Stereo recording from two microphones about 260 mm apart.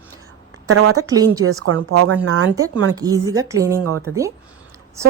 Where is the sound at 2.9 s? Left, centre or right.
Centre.